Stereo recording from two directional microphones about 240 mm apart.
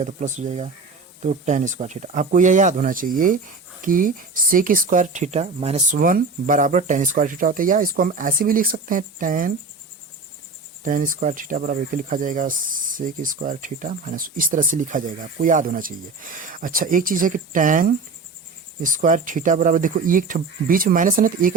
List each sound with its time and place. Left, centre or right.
0.0 s speech: right
10.8 s speech: right